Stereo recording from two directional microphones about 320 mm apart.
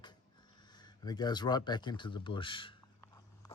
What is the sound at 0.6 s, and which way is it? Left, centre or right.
Speech, centre.